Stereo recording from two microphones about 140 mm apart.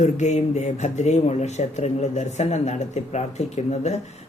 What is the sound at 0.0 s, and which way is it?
Speech, 55° left (ahead or behind).